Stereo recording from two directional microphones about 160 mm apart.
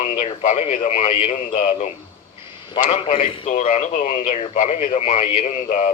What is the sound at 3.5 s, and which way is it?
Speech, 50° left (ahead or behind).